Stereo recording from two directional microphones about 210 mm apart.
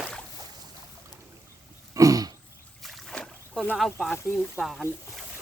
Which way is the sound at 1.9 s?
15° right (ahead or behind).